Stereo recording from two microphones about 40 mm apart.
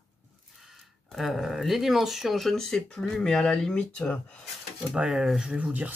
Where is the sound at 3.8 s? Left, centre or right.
Left.